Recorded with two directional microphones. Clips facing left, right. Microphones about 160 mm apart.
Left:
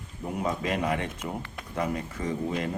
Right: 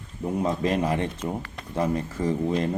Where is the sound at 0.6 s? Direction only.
35° right (ahead or behind).